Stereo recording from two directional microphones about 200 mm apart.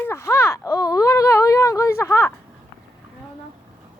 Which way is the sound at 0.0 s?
15° left (ahead or behind).